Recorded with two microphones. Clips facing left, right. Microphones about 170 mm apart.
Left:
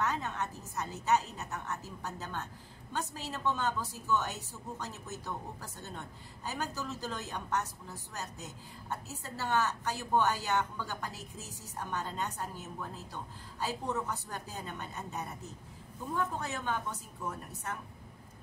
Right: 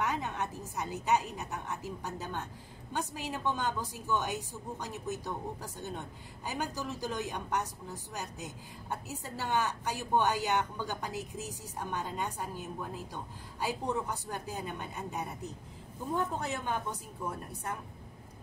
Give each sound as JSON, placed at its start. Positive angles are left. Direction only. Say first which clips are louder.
{"t": 0.0, "sound": "a woman's voice", "louder": "right 1 dB", "side_deg": -15}
{"t": 16.3, "sound": "a woman's voice", "louder": "right 1 dB", "side_deg": -15}